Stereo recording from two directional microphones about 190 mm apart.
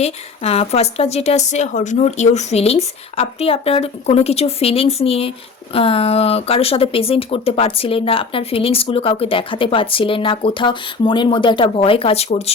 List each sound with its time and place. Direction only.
0.0 s a woman's voice: 35° left (ahead or behind)